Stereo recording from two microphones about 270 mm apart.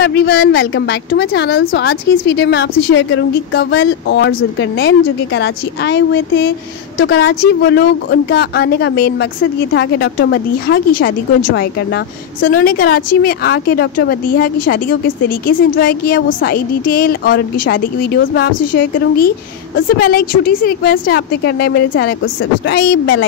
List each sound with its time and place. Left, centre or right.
0.0 s speech: left